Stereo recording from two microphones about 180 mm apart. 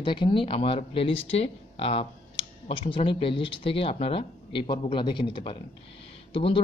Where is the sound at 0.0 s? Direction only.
25° left (ahead or behind).